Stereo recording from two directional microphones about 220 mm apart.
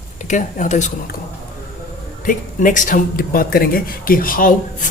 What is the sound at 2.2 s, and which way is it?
Speech, 35° left (ahead or behind).